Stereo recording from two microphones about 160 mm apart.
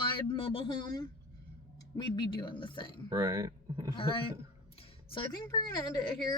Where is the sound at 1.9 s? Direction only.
30° left (ahead or behind).